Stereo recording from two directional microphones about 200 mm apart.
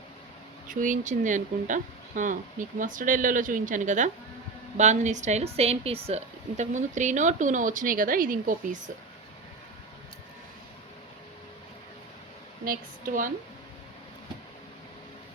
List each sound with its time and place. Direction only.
0.7 s speech: 40° right (ahead or behind)
12.6 s speech: 45° right (ahead or behind)